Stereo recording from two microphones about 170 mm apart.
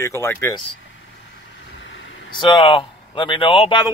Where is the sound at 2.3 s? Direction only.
30° left (ahead or behind).